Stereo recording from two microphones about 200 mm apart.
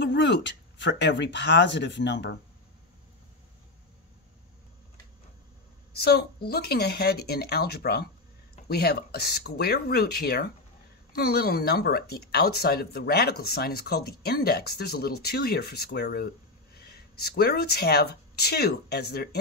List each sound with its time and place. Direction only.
0.0 s speech: 60° left (ahead or behind)
5.9 s speech: 55° left (ahead or behind)